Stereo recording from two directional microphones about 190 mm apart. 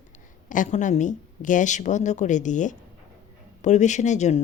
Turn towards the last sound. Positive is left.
turn(degrees=40)  # may be behind; listen again after turning